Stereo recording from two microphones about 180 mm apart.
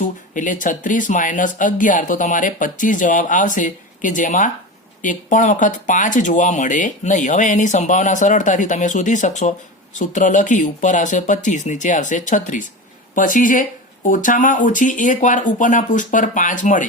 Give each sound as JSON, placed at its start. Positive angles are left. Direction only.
{"t": 0.0, "sound": "speech", "side_deg": 45}